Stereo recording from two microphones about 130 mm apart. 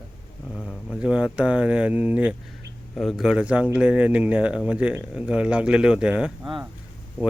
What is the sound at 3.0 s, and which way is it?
Speech, centre (ahead or behind).